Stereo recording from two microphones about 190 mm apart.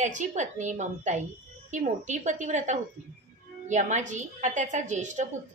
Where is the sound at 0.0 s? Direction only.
40° right (ahead or behind).